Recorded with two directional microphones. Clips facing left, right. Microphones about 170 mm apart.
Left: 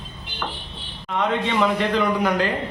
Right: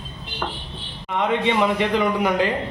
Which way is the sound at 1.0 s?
15° right (ahead or behind).